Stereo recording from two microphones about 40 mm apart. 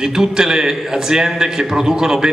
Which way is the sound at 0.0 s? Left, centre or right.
Centre.